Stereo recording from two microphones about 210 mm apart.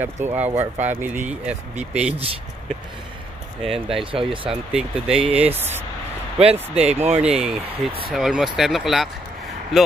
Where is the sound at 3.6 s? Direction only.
25° right (ahead or behind).